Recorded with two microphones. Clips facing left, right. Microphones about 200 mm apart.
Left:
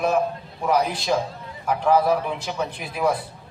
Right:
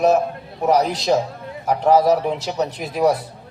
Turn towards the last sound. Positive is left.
turn(degrees=-40)  # may be behind; listen again after turning